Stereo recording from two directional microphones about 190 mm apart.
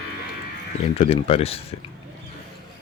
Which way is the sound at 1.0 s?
30° left (ahead or behind).